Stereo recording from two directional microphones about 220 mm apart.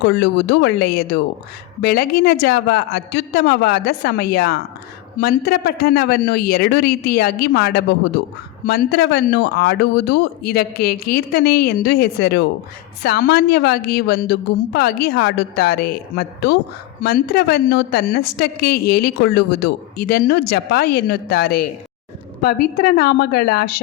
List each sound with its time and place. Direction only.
0.0 s speech: 50° left (ahead or behind)